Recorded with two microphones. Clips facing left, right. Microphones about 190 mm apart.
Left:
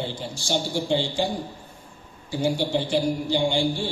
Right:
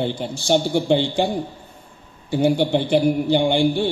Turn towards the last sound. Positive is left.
turn(degrees=-60)  # may be behind; listen again after turning